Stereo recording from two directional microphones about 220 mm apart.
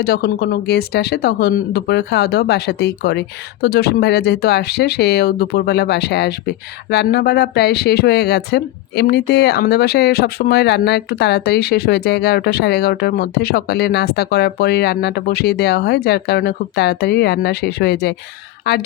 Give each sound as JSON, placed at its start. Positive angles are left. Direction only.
{"t": 0.0, "sound": "speech", "side_deg": 45}